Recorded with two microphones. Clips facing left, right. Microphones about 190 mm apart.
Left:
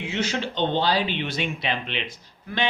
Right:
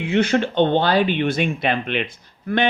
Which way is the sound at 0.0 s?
55° right (ahead or behind).